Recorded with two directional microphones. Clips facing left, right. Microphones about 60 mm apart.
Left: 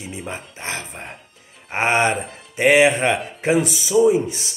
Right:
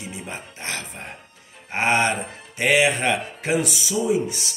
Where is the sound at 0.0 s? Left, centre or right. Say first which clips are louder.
Left 3 dB; left.